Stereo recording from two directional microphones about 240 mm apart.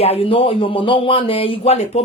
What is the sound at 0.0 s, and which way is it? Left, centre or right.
Speech, left.